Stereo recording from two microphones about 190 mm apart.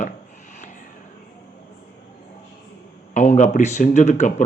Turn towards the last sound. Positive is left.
turn(degrees=35)  # may be behind; listen again after turning